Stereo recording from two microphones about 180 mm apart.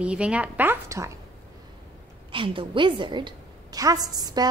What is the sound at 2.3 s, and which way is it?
A woman's voice, 30° right (ahead or behind).